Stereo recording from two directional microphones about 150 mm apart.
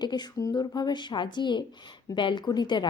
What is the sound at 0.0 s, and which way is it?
Speech, 30° left (ahead or behind).